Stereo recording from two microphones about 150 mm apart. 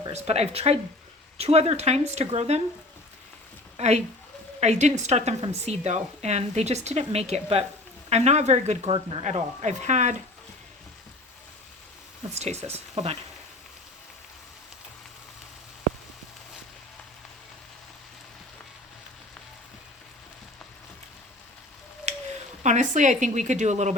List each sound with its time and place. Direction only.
0.1 s a woman's voice: 45° right (ahead or behind)
3.8 s a woman's voice: 50° right (ahead or behind)
9.2 s a woman's voice: 50° right (ahead or behind)
12.3 s a woman's voice: 50° right (ahead or behind)
22.1 s a sound: 50° right (ahead or behind)
22.6 s a woman's voice: 55° right (ahead or behind)